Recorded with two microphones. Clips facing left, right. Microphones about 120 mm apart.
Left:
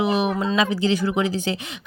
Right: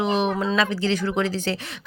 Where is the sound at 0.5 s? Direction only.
15° left (ahead or behind).